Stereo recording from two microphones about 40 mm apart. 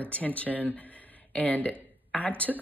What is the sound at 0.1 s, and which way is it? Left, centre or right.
Speech, left.